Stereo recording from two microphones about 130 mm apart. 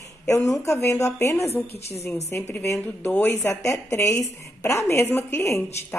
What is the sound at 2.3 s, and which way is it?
A woman's voice, 20° left (ahead or behind).